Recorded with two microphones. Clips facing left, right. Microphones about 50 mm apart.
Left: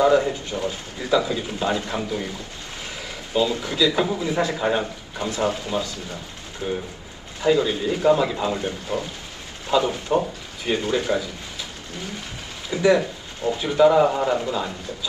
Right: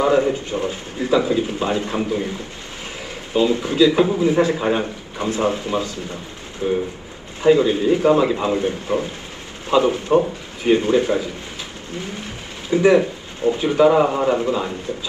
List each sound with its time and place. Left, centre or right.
0.0 s a man's voice: right
3.3 s a man's voice: right
7.4 s a man's voice: right
12.7 s a man's voice: right